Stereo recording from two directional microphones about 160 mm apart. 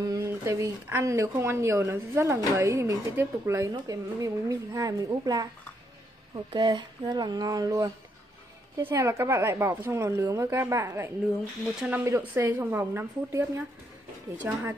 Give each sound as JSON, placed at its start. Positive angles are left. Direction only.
{"t": 0.0, "sound": "speech", "side_deg": -20}